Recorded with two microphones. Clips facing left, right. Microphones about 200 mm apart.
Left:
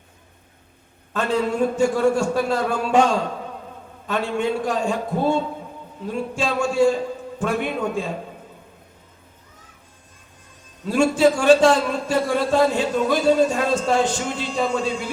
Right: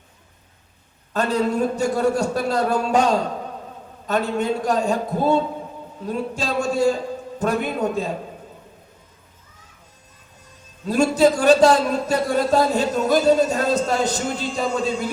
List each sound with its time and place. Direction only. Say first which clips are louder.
1.1 s a man's voice: right 1 dB; 40° right (ahead or behind)
10.8 s a man's voice: even; 40° right (ahead or behind)